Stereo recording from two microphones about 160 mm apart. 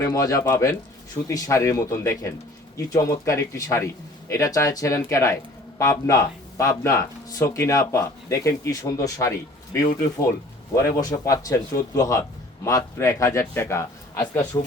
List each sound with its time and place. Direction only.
0.0 s speech: 20° left (ahead or behind)
14.5 s speech: 25° left (ahead or behind)